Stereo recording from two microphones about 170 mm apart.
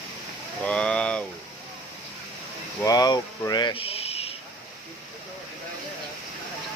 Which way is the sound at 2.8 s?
20° left (ahead or behind).